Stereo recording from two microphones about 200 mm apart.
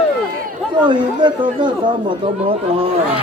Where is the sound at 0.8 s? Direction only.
25° right (ahead or behind).